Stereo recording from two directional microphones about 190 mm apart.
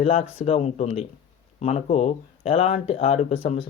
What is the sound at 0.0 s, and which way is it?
Speech, 30° left (ahead or behind).